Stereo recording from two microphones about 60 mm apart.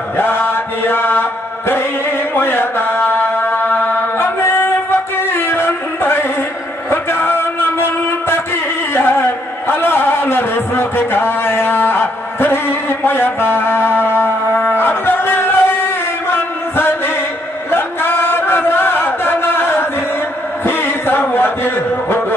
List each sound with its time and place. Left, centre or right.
0.2 s mantra: left
2.3 s mantra: left
4.2 s music: left
6.9 s a sound: left
12.4 s music: left
16.3 s chant: left
20.6 s a sound: left